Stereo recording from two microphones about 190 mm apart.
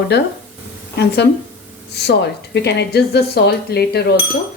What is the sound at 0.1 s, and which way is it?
Speech, 60° left (ahead or behind).